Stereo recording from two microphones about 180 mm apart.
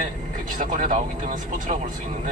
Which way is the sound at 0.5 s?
45° right (ahead or behind).